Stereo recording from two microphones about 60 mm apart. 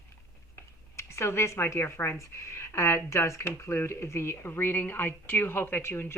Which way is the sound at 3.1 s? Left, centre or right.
Left.